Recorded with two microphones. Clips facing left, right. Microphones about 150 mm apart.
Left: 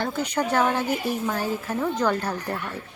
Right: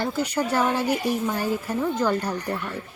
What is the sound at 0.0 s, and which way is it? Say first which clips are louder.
A woman's voice: right 1 dB; 5° right (ahead or behind).